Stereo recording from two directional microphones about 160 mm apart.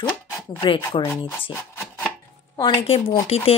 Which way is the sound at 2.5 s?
30° left (ahead or behind).